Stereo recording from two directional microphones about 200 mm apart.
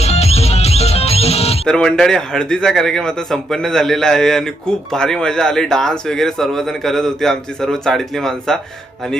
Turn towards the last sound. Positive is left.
turn(degrees=0)  # may be behind; listen again after turning